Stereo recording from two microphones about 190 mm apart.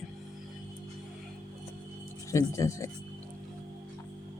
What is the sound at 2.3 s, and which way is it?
Speech, 15° left (ahead or behind).